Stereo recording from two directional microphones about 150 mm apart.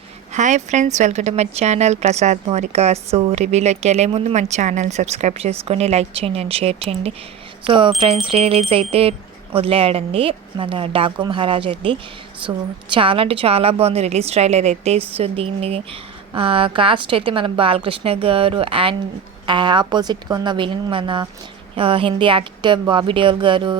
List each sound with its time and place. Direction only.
0.3 s a woman's voice: 55° right (ahead or behind); by 23.7 s 30° right (ahead or behind)